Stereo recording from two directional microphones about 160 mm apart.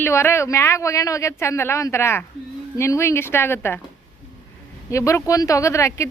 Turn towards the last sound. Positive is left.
turn(degrees=20)  # may be behind; listen again after turning